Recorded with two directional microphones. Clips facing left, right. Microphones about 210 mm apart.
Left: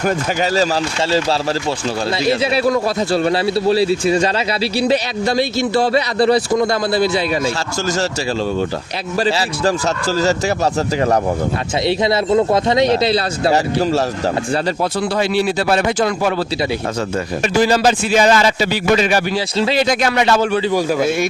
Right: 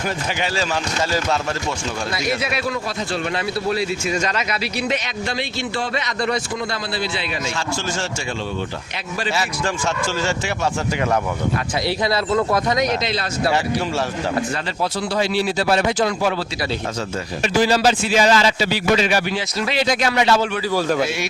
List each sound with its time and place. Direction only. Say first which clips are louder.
2.2 s a man's voice: left 8 dB; 30° left (ahead or behind)
9.1 s a man's voice: left 6 dB; 35° left (ahead or behind)
11.9 s speech: left 6 dB; 25° left (ahead or behind); by 14.0 s 40° left (ahead or behind)
15.1 s speech: left 2 dB; 55° left (ahead or behind)
17.4 s a man's voice: left 2 dB; 50° left (ahead or behind)